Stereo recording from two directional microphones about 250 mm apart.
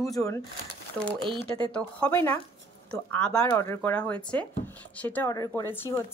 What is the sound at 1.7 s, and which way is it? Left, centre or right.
Speech, centre.